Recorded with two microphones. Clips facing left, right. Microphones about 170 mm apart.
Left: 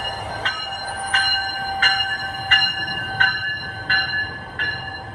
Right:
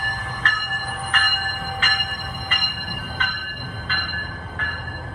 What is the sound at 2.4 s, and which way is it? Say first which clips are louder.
Train: left 8 dB; 70° left (ahead or behind).